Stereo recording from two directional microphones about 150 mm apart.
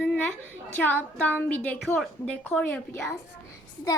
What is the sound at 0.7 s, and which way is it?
A woman's voice, 10° left (ahead or behind).